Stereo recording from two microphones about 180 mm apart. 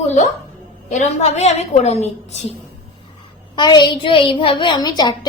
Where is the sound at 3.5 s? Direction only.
25° left (ahead or behind).